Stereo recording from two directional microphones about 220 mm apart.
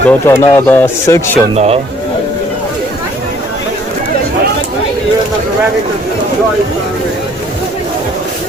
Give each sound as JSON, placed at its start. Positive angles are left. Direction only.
{"t": 0.1, "sound": "speech", "side_deg": 10}
{"t": 1.5, "sound": "a man's voice", "side_deg": -30}